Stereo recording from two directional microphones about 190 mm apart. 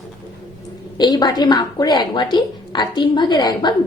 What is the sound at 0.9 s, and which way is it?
A woman's voice, 20° left (ahead or behind).